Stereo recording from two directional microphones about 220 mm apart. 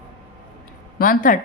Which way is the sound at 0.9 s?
40° left (ahead or behind).